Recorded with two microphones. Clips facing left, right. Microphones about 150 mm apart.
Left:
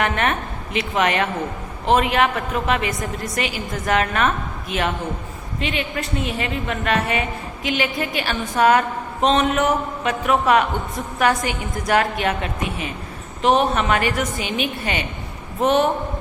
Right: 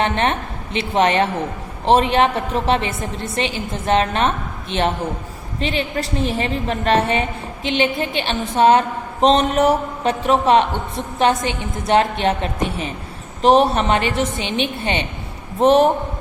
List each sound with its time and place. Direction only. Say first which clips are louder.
0.0 s a woman's voice: right 2 dB; 30° right (ahead or behind)